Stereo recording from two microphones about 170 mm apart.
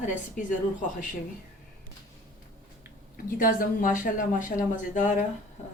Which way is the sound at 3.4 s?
55° left (ahead or behind).